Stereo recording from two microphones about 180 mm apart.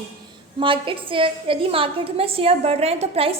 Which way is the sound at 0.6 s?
30° right (ahead or behind).